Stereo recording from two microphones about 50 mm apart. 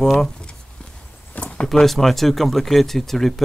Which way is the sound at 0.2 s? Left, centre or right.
Centre.